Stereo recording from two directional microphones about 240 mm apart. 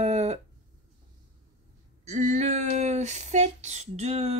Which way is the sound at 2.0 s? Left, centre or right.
Right.